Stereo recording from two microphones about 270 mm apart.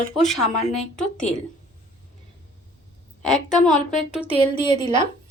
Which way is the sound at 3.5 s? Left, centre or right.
Centre.